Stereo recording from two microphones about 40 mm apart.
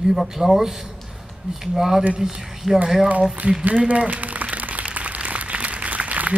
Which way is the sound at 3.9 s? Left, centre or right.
Right.